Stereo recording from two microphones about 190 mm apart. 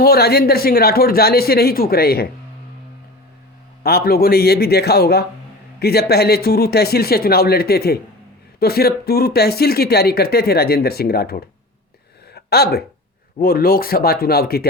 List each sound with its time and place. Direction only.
0.0 s speech: 55° left (ahead or behind)
3.8 s speech: 55° left (ahead or behind)
12.3 s a sound: 55° left (ahead or behind)
13.4 s speech: 50° left (ahead or behind)